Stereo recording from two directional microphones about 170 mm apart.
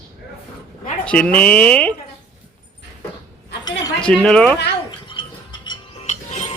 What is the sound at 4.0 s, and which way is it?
Speech, 5° left (ahead or behind).